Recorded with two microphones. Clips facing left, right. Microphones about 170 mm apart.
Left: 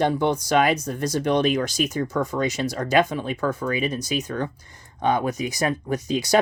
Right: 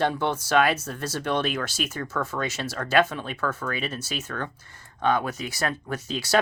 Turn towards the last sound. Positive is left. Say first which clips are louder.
# left 6 dB
turn(degrees=15)  # may be behind; listen again after turning